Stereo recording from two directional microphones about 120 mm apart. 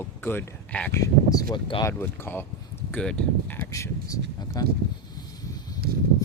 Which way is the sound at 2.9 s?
5° left (ahead or behind).